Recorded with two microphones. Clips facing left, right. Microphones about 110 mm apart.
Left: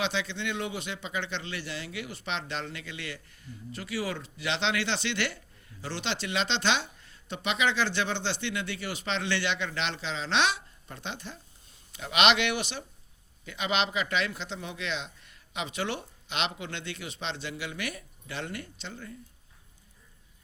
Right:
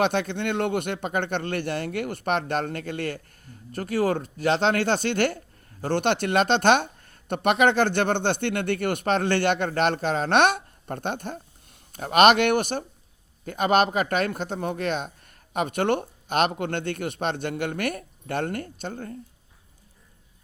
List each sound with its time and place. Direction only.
0.0 s speech: 50° right (ahead or behind)